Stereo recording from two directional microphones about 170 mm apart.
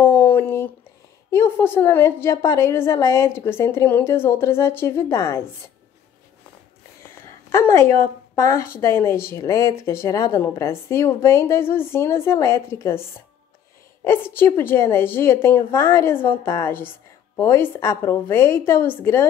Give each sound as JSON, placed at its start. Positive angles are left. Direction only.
{"t": 0.0, "sound": "a sound", "side_deg": 10}
{"t": 1.3, "sound": "a woman's voice", "side_deg": 15}
{"t": 7.2, "sound": "a woman's voice", "side_deg": 15}